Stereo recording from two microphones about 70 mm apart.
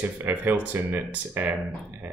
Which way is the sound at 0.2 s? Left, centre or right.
Right.